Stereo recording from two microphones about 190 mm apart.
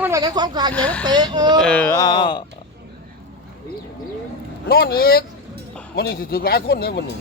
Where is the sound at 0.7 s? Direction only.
5° left (ahead or behind).